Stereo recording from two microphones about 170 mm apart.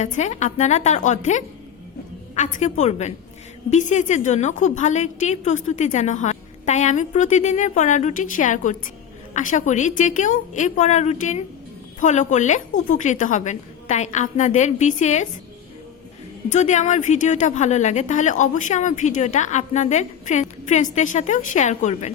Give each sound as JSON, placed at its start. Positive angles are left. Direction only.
{"t": 0.0, "sound": "a woman's voice", "side_deg": 45}
{"t": 16.5, "sound": "a woman's voice", "side_deg": 45}